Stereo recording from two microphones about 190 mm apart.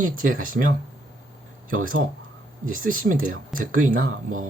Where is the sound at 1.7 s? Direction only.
45° right (ahead or behind).